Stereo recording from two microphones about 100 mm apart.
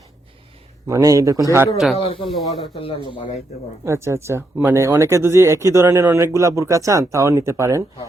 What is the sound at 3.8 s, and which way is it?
Speech, 30° right (ahead or behind).